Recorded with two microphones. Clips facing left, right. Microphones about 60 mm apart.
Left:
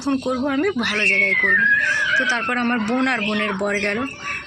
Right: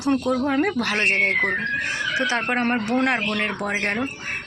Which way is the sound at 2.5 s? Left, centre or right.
Centre.